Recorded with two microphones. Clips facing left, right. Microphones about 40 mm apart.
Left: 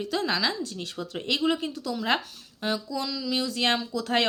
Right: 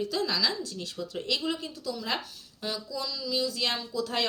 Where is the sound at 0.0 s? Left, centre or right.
Left.